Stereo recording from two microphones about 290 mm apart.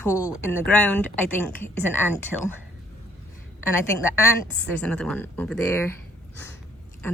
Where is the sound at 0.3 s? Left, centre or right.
Centre.